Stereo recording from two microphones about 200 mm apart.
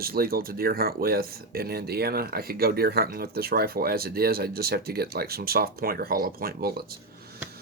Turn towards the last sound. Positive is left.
turn(degrees=-50)  # may be behind; listen again after turning